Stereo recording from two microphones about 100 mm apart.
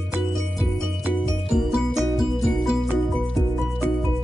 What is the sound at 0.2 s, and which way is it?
Music, centre (ahead or behind).